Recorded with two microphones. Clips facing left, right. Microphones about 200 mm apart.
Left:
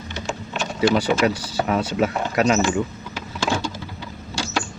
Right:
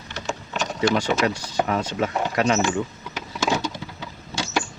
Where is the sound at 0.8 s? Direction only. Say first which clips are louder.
Left 3 dB; 5° left (ahead or behind).